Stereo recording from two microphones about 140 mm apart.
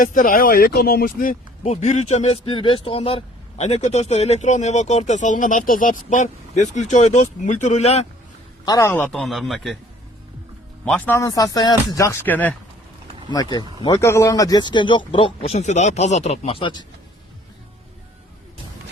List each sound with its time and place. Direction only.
0.0 s speech: 75° left (ahead or behind); by 1.4 s 90° left
1.6 s speech: 55° left (ahead or behind)
8.6 s speech: 25° left (ahead or behind)
9.0 s speech: 5° left (ahead or behind)
10.8 s speech: 10° left (ahead or behind)
11.2 s speech: 25° left (ahead or behind)
13.3 s a man's voice: 30° left (ahead or behind)